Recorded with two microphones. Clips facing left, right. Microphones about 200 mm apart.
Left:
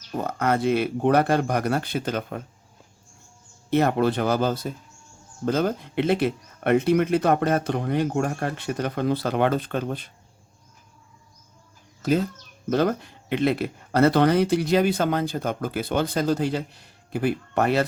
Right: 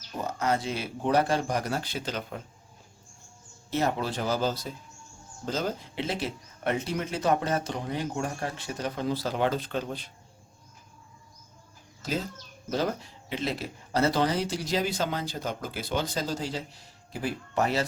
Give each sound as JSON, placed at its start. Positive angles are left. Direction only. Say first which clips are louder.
{"t": 0.2, "sound": "speech", "louder": "left 5 dB", "side_deg": 60}
{"t": 3.7, "sound": "speech", "louder": "left 8 dB", "side_deg": 60}
{"t": 12.0, "sound": "speech", "louder": "left 9 dB", "side_deg": 55}